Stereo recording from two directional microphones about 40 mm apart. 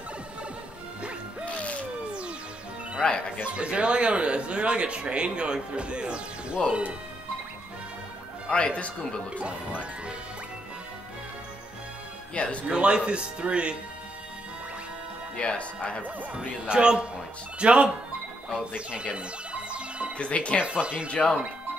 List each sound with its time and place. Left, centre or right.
1.6 s a sound: left
3.0 s speech: centre
3.5 s speech: right
8.5 s speech: left
9.4 s speech: right
12.4 s speech: left
12.6 s speech: right
15.3 s speech: left
16.6 s speech: right
19.1 s music: right
20.2 s speech: left